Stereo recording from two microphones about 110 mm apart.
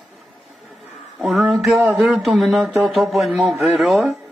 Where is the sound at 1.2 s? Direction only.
5° right (ahead or behind).